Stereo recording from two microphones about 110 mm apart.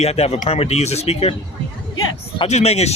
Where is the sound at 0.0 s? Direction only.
70° left (ahead or behind).